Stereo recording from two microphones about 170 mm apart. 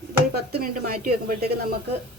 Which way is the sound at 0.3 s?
65° right (ahead or behind).